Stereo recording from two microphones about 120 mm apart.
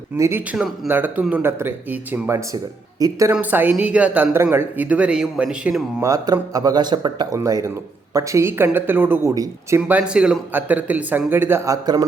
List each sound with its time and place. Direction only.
0.2 s speech: 20° right (ahead or behind)
3.3 s speech: 15° right (ahead or behind)
6.0 s speech: 30° right (ahead or behind)
7.3 s speech: 25° right (ahead or behind)
10.0 s speech: 5° right (ahead or behind); by 12.0 s 30° right (ahead or behind)